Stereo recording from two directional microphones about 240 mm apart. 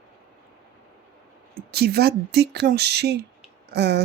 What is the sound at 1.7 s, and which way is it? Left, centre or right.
Speech, right.